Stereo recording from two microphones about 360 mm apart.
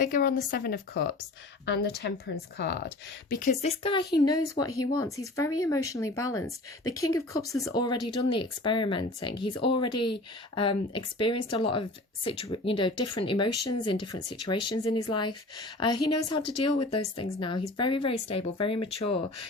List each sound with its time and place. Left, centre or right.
0.0 s speech: left
2.0 s speech: left
3.6 s speech: centre